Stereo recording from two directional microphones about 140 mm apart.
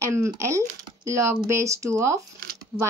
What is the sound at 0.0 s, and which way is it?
Speech, 20° right (ahead or behind).